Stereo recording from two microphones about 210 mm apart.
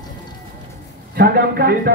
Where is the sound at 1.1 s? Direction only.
45° right (ahead or behind).